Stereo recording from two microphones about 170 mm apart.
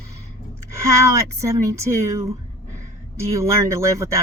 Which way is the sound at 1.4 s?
15° right (ahead or behind).